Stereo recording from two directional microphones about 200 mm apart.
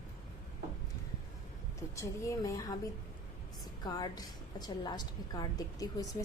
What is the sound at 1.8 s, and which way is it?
Speech, 15° left (ahead or behind).